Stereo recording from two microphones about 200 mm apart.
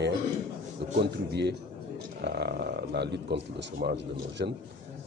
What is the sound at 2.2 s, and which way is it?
Speech, 55° right (ahead or behind).